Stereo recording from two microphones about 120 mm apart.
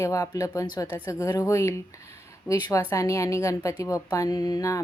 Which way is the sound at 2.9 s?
25° left (ahead or behind).